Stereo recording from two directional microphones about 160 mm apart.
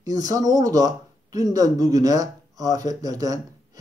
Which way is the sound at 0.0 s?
25° right (ahead or behind).